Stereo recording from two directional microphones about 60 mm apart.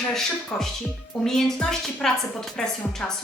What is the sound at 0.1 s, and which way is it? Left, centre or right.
A woman's voice, centre.